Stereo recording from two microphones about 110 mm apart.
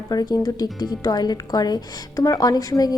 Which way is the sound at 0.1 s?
35° left (ahead or behind).